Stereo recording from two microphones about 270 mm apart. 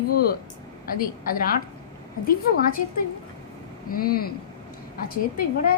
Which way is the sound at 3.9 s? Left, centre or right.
Left.